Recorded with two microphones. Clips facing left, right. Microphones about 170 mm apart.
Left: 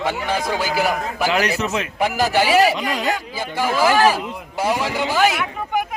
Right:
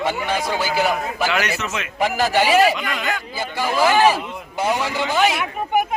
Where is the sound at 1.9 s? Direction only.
10° left (ahead or behind).